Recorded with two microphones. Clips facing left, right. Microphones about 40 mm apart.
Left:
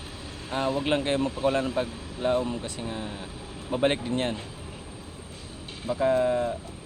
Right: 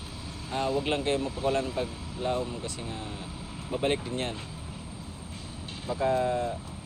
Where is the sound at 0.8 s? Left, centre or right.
Left.